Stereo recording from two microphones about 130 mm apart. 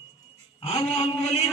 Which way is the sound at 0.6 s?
50° left (ahead or behind).